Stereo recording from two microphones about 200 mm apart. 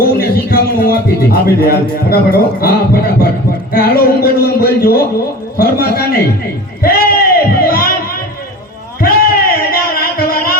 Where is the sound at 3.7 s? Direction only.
50° left (ahead or behind).